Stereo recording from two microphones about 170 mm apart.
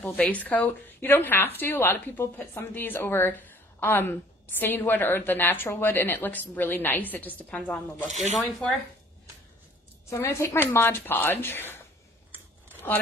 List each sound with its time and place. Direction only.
0.0 s a woman's voice: 10° left (ahead or behind)
10.0 s a woman's voice: 15° left (ahead or behind)